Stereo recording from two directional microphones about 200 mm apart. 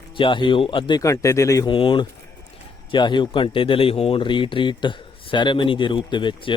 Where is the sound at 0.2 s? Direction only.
25° left (ahead or behind).